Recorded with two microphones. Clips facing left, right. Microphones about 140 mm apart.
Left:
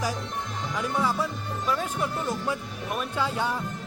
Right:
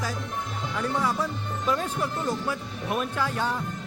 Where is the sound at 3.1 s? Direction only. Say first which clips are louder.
Even; 15° left (ahead or behind).